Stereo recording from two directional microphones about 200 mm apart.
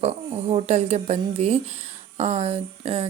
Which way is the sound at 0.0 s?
30° right (ahead or behind).